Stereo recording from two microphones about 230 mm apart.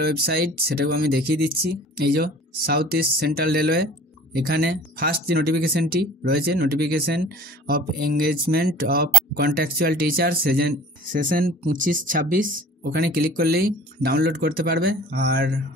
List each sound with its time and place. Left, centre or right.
0.0 s speech: right